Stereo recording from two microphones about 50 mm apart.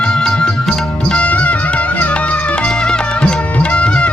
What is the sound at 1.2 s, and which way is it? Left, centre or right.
Music, left.